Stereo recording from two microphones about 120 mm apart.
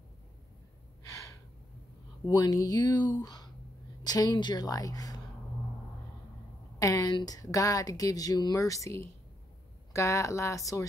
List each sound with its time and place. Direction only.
2.2 s a woman's voice: 30° left (ahead or behind)
6.8 s a woman's voice: 30° left (ahead or behind)